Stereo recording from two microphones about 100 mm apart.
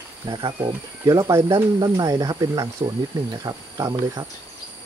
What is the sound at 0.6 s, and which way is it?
Speech, 35° right (ahead or behind).